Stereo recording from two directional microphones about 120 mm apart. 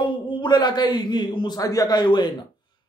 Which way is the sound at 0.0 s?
40° left (ahead or behind).